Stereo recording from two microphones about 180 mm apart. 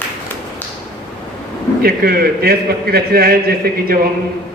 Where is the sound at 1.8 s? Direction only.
60° right (ahead or behind).